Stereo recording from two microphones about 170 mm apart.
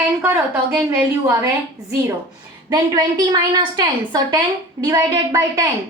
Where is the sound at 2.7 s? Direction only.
25° right (ahead or behind).